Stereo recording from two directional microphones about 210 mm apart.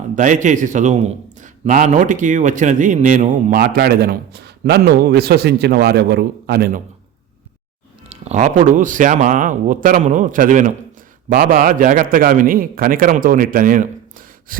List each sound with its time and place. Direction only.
0.2 s a man's voice: 35° right (ahead or behind)
8.1 s a man's voice: 30° right (ahead or behind)